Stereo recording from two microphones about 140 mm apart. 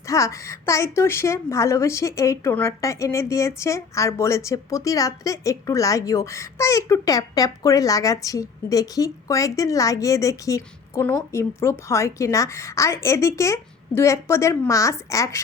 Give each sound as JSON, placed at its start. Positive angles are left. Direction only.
{"t": 0.0, "sound": "a woman's voice", "side_deg": 20}